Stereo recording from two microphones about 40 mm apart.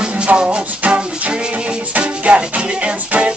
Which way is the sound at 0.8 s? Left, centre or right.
Right.